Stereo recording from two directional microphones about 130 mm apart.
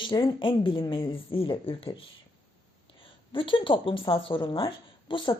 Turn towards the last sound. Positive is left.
turn(degrees=40)  # may be behind; listen again after turning